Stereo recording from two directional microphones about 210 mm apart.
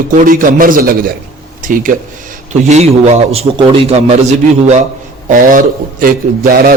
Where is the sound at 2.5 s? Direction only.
35° right (ahead or behind).